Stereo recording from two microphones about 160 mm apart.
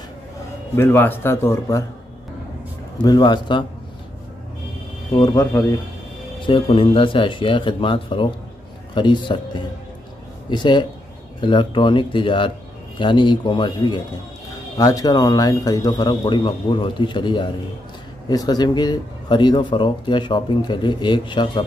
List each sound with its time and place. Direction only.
0.7 s speech: 15° left (ahead or behind)
3.0 s speech: 25° left (ahead or behind)
5.1 s speech: 25° left (ahead or behind)
6.4 s speech: 35° left (ahead or behind)